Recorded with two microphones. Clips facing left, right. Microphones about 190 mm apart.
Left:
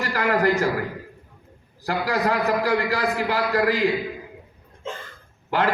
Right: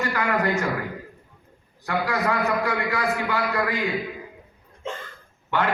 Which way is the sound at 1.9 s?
35° left (ahead or behind).